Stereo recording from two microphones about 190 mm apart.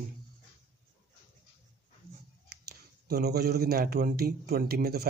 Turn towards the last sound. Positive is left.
turn(degrees=-55)  # may be behind; listen again after turning